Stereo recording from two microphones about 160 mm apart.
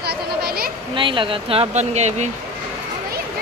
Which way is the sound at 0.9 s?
30° right (ahead or behind).